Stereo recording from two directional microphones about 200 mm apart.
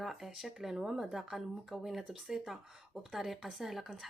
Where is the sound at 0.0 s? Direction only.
Centre (ahead or behind).